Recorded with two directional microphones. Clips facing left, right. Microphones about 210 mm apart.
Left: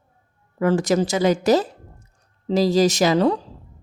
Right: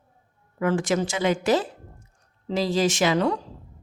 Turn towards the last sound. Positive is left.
turn(degrees=35)  # may be behind; listen again after turning